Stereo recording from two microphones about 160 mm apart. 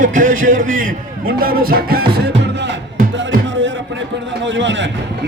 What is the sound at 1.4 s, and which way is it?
Music, 70° right (ahead or behind).